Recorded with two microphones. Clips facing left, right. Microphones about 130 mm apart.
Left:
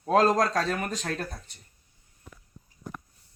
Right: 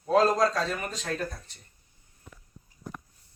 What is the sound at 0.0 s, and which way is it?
Speech, 45° left (ahead or behind).